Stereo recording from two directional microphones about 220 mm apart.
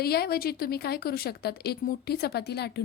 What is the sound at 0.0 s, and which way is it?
A woman's voice, 45° left (ahead or behind).